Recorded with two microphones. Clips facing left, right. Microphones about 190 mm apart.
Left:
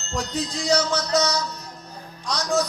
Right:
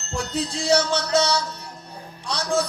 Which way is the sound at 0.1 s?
30° right (ahead or behind).